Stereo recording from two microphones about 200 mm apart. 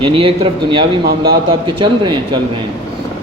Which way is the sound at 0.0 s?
25° right (ahead or behind).